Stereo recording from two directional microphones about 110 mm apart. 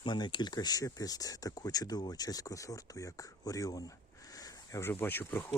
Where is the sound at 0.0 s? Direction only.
45° left (ahead or behind).